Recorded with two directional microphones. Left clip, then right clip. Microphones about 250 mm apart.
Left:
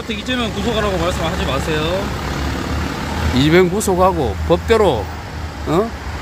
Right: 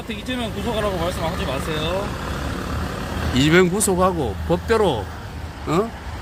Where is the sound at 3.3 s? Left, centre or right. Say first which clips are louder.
Left 3 dB; centre.